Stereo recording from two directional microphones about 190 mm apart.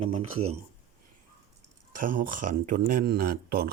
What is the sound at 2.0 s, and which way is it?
Speech, 45° right (ahead or behind).